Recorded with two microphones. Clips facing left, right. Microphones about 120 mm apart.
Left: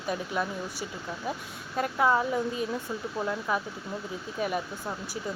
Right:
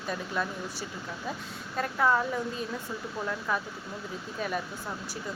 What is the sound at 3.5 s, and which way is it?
Speech, 15° left (ahead or behind).